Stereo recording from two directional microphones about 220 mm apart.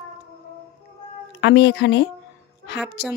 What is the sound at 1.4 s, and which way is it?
Speech, 50° left (ahead or behind).